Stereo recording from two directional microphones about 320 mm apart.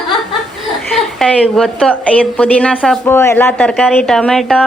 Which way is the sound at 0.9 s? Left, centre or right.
Centre.